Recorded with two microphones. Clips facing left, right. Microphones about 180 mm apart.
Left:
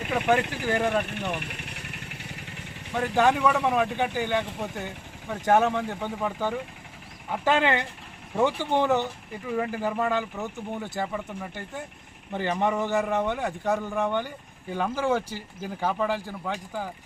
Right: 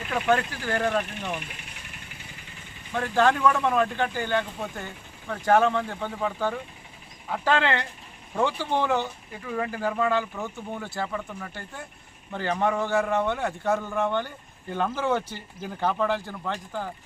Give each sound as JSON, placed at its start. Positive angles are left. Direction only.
{"t": 0.1, "sound": "a man's voice", "side_deg": 15}
{"t": 1.0, "sound": "vehicle", "side_deg": 60}
{"t": 2.9, "sound": "a man's voice", "side_deg": 15}